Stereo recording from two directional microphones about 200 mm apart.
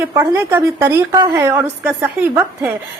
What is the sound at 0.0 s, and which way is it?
A woman's voice, 10° right (ahead or behind).